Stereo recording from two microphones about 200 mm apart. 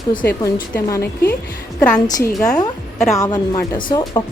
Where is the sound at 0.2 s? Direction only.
50° left (ahead or behind).